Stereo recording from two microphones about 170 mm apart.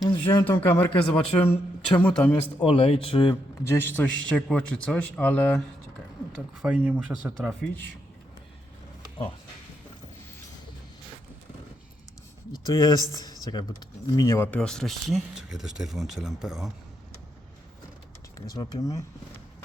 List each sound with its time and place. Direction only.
0.0 s a sound: 25° left (ahead or behind)
0.6 s a man's voice: 10° left (ahead or behind)
2.6 s speech: 35° left (ahead or behind)
3.7 s a man's voice: 10° left (ahead or behind)
6.6 s speech: 5° right (ahead or behind)
12.5 s speech: 20° left (ahead or behind); by 16.7 s centre (ahead or behind)
18.3 s speech: 20° left (ahead or behind)